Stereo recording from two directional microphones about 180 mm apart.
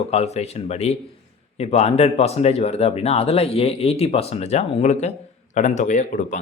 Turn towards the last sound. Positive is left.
turn(degrees=45)  # may be behind; listen again after turning